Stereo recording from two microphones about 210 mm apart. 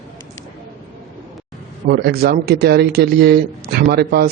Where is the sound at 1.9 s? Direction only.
45° right (ahead or behind).